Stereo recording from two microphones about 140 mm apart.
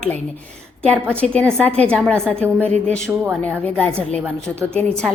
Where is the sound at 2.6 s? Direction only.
10° left (ahead or behind).